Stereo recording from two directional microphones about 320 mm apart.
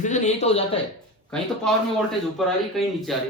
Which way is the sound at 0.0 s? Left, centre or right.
Left.